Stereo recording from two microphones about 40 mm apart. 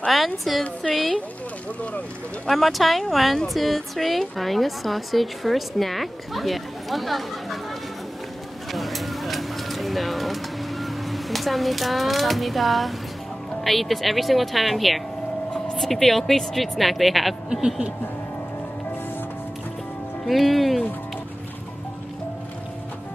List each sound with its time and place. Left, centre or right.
0.5 s speech: centre
2.4 s speech: centre
8.7 s a sound: centre
13.7 s speech: centre
17.5 s speech: centre
20.2 s speech: centre